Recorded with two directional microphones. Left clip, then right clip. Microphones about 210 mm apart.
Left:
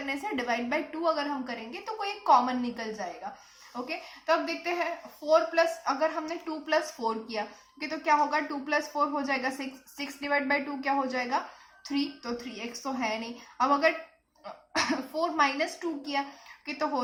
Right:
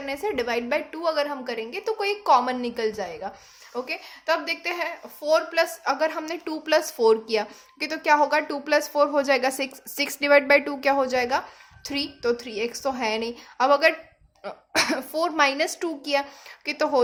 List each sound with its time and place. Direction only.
0.0 s a woman's voice: 45° right (ahead or behind)